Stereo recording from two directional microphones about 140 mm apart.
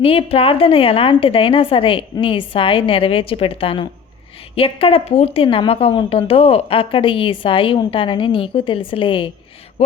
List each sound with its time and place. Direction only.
0.0 s a woman's voice: 45° left (ahead or behind)